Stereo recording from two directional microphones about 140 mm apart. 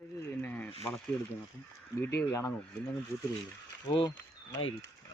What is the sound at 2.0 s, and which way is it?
Speech, 20° left (ahead or behind).